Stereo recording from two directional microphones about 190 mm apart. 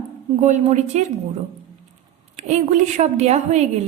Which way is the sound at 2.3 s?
35° right (ahead or behind).